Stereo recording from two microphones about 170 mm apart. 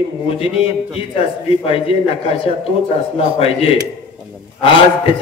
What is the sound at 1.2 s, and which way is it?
Speech, 35° left (ahead or behind).